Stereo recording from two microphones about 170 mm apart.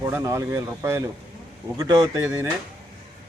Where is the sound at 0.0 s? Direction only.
15° right (ahead or behind).